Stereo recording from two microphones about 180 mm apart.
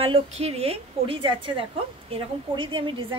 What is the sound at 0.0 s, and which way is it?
A woman's voice, 35° right (ahead or behind).